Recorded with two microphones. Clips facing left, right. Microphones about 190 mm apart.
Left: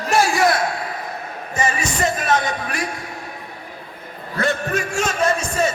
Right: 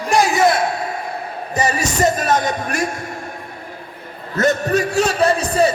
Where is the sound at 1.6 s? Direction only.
40° right (ahead or behind).